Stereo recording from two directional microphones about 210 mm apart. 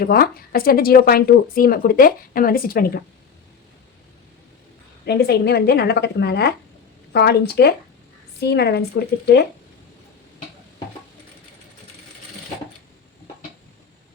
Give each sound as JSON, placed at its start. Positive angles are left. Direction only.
{"t": 0.0, "sound": "speech", "side_deg": 45}
{"t": 5.0, "sound": "speech", "side_deg": 50}